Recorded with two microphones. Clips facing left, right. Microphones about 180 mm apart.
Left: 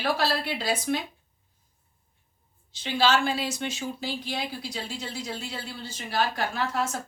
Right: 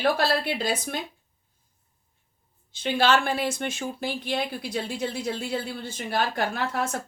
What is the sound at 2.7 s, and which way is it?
A woman's voice, 55° right (ahead or behind).